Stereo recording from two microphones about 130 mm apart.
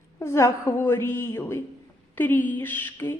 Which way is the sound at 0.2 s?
20° left (ahead or behind).